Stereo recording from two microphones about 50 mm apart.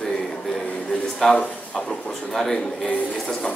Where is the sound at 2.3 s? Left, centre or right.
Centre.